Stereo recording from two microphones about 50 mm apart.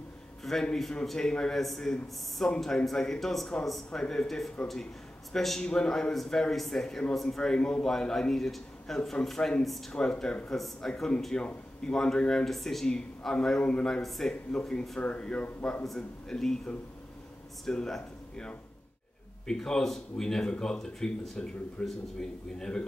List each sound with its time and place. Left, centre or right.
0.4 s a man's voice: centre
5.6 s a man's voice: centre
9.9 s speech: centre
12.4 s a man's voice: centre
15.0 s speech: left